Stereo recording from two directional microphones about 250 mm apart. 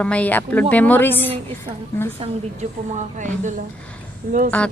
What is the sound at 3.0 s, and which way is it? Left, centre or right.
Speech, right.